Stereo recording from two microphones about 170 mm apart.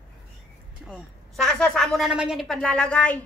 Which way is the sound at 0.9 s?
Centre (ahead or behind).